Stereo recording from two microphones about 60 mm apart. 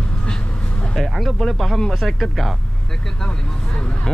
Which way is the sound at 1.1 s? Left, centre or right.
Centre.